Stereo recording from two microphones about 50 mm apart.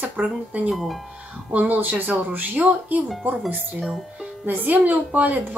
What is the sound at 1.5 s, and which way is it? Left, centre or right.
Speech, right.